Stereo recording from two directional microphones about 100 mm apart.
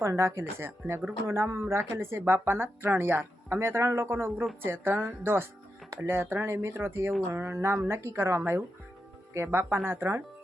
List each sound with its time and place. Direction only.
0.0 s speech: 25° right (ahead or behind)